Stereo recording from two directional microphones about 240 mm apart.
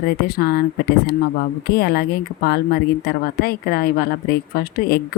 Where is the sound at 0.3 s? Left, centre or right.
Left.